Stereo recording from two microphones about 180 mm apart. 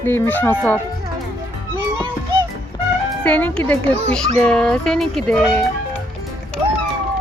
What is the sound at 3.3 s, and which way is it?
Speech, 10° left (ahead or behind).